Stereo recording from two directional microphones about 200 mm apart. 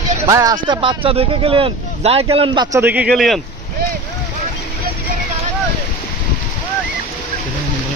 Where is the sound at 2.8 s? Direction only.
5° right (ahead or behind).